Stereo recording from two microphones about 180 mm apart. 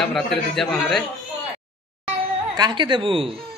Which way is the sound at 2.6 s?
25° right (ahead or behind).